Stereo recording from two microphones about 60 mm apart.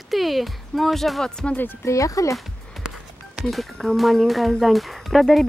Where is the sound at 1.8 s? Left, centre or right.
Left.